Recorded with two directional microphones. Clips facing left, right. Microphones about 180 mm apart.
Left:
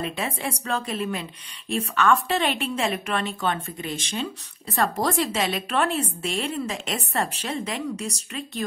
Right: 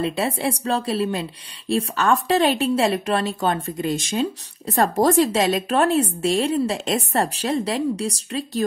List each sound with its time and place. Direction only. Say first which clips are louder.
0.0 s speech: right 6 dB; 35° right (ahead or behind)